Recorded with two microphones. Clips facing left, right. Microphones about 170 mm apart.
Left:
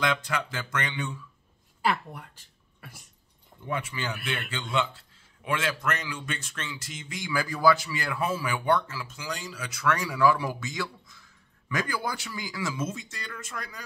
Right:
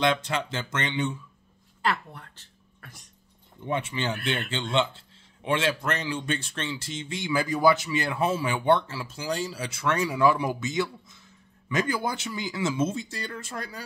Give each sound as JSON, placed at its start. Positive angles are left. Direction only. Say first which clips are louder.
{"t": 0.0, "sound": "a man's voice", "louder": "right 3 dB", "side_deg": -25}
{"t": 1.8, "sound": "a woman's voice", "louder": "left 1 dB", "side_deg": 10}
{"t": 3.6, "sound": "a man's voice", "louder": "right 4 dB", "side_deg": -25}